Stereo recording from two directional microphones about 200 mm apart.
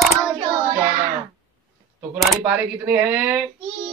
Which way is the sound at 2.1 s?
5° right (ahead or behind).